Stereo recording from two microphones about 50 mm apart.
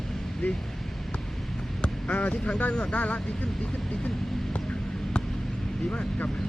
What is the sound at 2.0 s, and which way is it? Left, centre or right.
Speech, left.